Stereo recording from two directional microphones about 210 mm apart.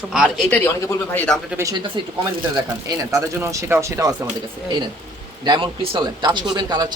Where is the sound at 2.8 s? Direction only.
15° right (ahead or behind).